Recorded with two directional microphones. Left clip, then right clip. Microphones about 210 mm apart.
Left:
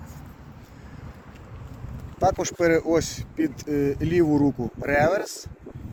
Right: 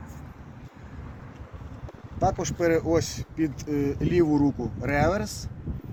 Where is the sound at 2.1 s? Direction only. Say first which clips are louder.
Left 3 dB; 30° left (ahead or behind).